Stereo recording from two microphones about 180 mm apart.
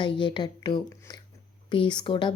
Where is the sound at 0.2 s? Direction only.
25° left (ahead or behind).